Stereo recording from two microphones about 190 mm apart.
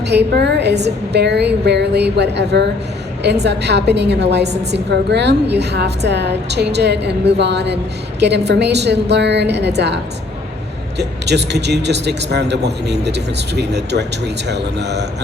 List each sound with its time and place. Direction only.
0.1 s a woman's voice: 60° right (ahead or behind)